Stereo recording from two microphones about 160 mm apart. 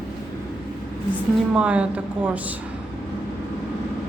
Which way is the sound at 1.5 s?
5° right (ahead or behind).